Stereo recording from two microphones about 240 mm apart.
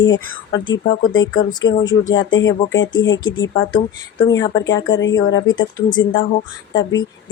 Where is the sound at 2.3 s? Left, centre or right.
Left.